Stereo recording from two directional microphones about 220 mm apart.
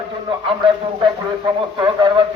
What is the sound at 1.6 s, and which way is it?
Speech, 20° right (ahead or behind).